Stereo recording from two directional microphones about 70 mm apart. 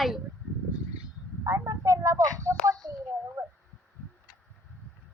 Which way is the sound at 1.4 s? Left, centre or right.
Right.